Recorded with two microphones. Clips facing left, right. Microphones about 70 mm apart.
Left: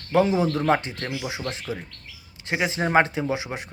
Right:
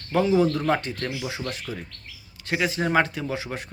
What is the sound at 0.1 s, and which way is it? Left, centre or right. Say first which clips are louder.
A man's voice: even; centre.